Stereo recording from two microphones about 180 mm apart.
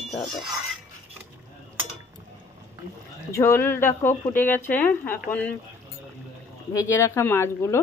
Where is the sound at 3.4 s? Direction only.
15° left (ahead or behind).